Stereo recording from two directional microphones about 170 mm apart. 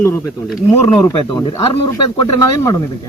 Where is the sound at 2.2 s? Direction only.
25° left (ahead or behind).